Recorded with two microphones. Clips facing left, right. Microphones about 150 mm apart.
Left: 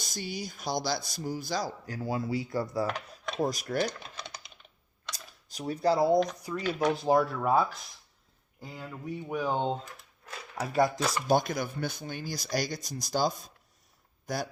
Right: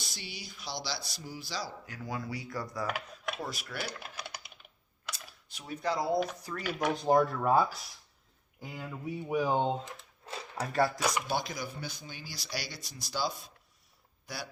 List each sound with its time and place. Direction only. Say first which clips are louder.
0.0 s speech: left 9 dB; 45° left (ahead or behind); by 2.8 s 25° left (ahead or behind)
2.8 s dishes: left 2 dB; 5° right (ahead or behind)
3.3 s speech: left 15 dB; 40° left (ahead or behind)
3.8 s typing: left 4 dB; 10° right (ahead or behind)
5.1 s camera: left 7 dB; 40° left (ahead or behind)
6.7 s speech: left 1 dB; 5° left (ahead or behind)
9.8 s a sound: right 2 dB; 30° right (ahead or behind)
10.7 s speech: left 3 dB; 15° left (ahead or behind)
11.3 s speech: left 8 dB; 50° left (ahead or behind)